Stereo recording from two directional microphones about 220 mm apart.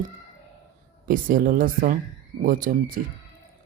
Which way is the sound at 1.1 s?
40° right (ahead or behind).